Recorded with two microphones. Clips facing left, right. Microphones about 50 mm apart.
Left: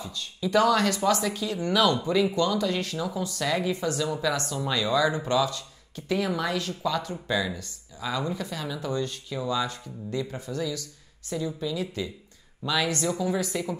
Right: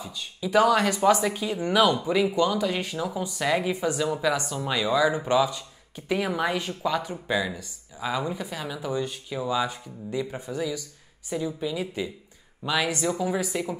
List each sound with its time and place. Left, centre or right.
0.1 s speech: centre